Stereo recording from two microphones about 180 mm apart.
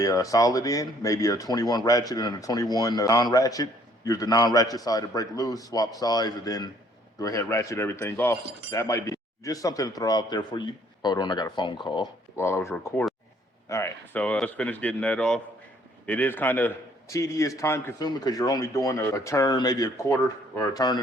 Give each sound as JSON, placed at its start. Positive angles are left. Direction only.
{"t": 0.0, "sound": "a man's voice", "side_deg": 20}
{"t": 12.4, "sound": "a man's voice", "side_deg": 15}